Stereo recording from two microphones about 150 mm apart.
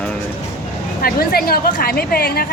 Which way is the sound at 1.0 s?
85° left.